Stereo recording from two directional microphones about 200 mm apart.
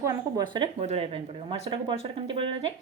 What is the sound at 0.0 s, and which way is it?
Speech, 15° right (ahead or behind).